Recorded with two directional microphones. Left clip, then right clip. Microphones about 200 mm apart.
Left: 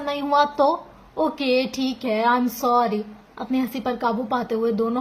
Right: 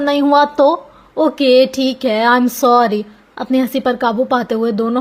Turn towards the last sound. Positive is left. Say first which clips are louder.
# right 6 dB
turn(degrees=-35)  # may be behind; listen again after turning